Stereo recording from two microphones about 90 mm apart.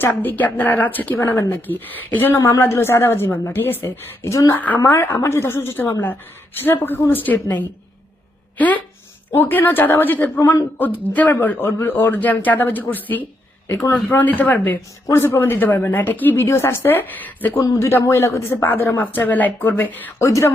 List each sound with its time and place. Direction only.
0.0 s speech: 20° left (ahead or behind)
3.8 s speech: 35° left (ahead or behind)
4.5 s speech: 20° left (ahead or behind)
17.6 s speech: 35° left (ahead or behind)
20.1 s speech: 35° left (ahead or behind)